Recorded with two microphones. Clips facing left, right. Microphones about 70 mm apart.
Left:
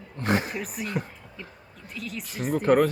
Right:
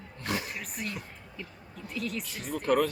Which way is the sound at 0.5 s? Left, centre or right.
Centre.